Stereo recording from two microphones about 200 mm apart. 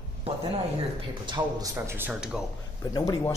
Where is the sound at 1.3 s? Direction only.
15° right (ahead or behind).